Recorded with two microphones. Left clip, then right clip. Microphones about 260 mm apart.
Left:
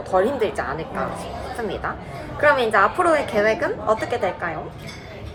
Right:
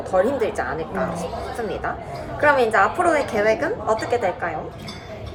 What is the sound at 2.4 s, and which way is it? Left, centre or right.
A woman's voice, centre.